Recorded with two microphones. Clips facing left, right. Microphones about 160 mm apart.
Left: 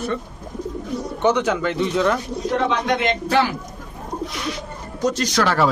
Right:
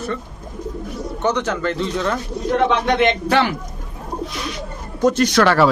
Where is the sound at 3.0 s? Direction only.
70° right (ahead or behind).